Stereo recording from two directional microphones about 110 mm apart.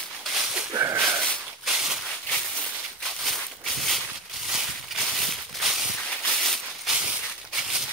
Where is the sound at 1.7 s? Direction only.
5° right (ahead or behind).